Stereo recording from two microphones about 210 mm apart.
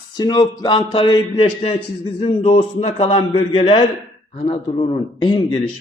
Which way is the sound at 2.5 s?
30° left (ahead or behind).